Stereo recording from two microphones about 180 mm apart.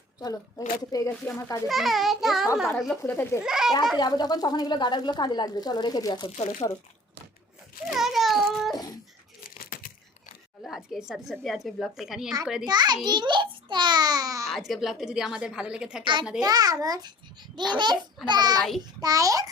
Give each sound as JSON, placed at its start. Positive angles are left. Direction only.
{"t": 0.2, "sound": "speech", "side_deg": 20}
{"t": 1.6, "sound": "speech", "side_deg": 0}
{"t": 3.0, "sound": "speech", "side_deg": 10}
{"t": 3.4, "sound": "speech", "side_deg": -5}
{"t": 3.9, "sound": "speech", "side_deg": 25}
{"t": 6.3, "sound": "speech", "side_deg": 35}
{"t": 7.9, "sound": "a sound", "side_deg": 0}
{"t": 9.4, "sound": "crumpling", "side_deg": 50}
{"t": 10.6, "sound": "speech", "side_deg": 0}
{"t": 12.6, "sound": "a child's voice", "side_deg": -25}
{"t": 14.5, "sound": "speech", "side_deg": 0}
{"t": 16.4, "sound": "a child's voice", "side_deg": -20}